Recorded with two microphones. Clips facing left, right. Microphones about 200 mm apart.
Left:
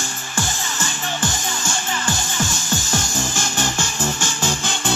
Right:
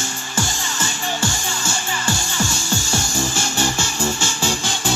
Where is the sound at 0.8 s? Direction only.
10° right (ahead or behind).